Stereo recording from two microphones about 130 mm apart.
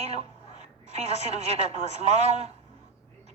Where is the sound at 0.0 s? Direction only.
55° right (ahead or behind).